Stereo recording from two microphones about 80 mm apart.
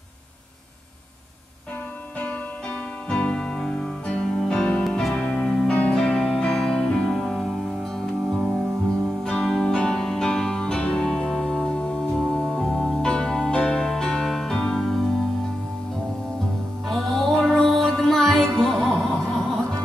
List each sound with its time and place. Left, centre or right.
3.1 s music: centre
5.7 s music: centre
16.8 s music: centre